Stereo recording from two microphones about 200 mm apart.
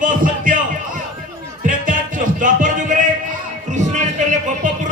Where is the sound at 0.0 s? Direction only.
40° right (ahead or behind).